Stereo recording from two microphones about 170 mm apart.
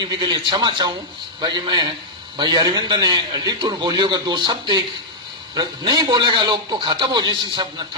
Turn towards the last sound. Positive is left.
turn(degrees=-25)  # may be behind; listen again after turning